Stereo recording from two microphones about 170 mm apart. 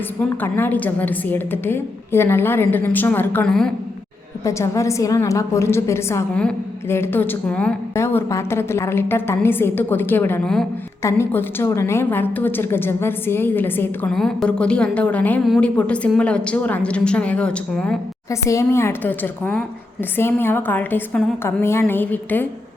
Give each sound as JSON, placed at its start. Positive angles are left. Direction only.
{"t": 0.3, "sound": "a woman's voice", "side_deg": 10}
{"t": 4.4, "sound": "a woman's voice", "side_deg": 15}
{"t": 18.3, "sound": "a woman's voice", "side_deg": 15}